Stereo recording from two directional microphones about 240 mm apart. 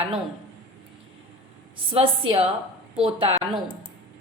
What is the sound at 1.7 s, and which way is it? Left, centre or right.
A woman's voice, right.